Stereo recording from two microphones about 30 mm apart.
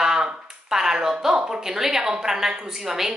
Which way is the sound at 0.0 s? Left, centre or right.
Right.